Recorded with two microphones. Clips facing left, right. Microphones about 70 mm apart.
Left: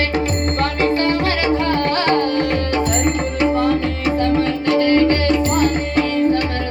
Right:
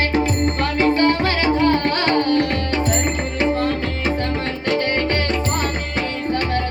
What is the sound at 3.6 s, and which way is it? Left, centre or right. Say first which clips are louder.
Music: left 4 dB; right.